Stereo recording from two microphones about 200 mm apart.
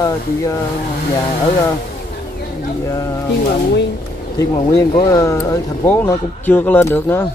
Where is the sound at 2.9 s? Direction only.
15° left (ahead or behind).